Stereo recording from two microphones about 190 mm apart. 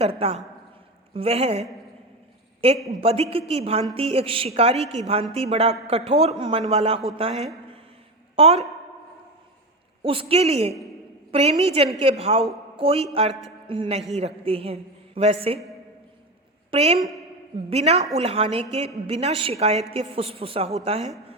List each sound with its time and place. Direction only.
0.0 s a woman's voice: 30° right (ahead or behind)
2.6 s a woman's voice: 30° right (ahead or behind)
10.0 s a woman's voice: 30° right (ahead or behind)
16.7 s a woman's voice: 30° right (ahead or behind)